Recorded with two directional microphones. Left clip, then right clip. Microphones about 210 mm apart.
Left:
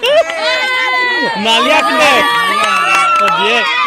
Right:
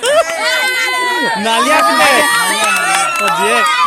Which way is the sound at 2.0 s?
50° right (ahead or behind).